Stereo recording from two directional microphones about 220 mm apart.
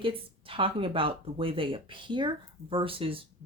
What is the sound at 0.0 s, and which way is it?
Speech, 25° right (ahead or behind).